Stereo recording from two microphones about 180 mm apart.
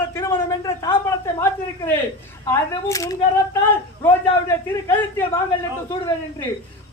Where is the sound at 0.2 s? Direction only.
15° left (ahead or behind).